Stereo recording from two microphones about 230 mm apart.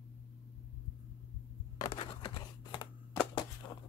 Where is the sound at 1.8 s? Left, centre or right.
Left.